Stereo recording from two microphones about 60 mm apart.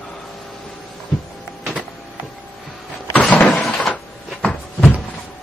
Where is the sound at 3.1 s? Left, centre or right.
Left.